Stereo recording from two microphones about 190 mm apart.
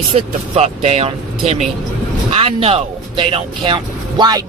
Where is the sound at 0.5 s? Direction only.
35° right (ahead or behind).